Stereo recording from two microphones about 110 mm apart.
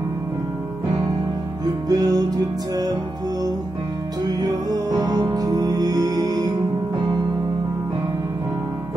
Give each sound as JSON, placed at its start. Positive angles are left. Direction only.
{"t": 1.9, "sound": "music", "side_deg": -35}
{"t": 4.2, "sound": "music", "side_deg": -35}